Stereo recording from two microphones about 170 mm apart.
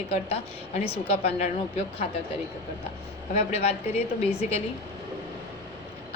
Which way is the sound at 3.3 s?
35° left (ahead or behind).